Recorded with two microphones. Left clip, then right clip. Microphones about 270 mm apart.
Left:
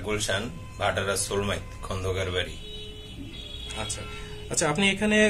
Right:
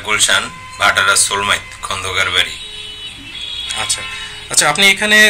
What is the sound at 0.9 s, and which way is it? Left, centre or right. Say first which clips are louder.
Speech: right 15 dB; centre.